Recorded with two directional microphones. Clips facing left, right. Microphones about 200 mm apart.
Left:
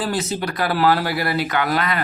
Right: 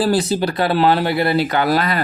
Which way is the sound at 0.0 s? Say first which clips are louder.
Right 6 dB; 35° right (ahead or behind).